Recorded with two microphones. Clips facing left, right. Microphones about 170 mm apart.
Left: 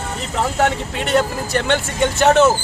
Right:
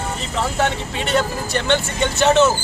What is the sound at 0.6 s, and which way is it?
Speech, 45° left (ahead or behind).